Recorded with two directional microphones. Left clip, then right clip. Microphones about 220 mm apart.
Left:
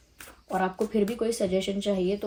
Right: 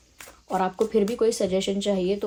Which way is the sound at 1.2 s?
40° right (ahead or behind).